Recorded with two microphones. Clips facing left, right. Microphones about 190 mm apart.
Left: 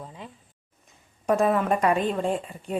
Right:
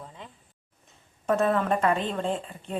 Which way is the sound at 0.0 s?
15° left (ahead or behind).